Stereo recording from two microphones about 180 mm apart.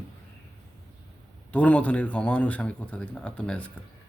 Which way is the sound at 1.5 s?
5° left (ahead or behind).